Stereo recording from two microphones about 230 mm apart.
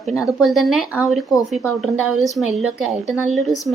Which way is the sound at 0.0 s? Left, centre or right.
Centre.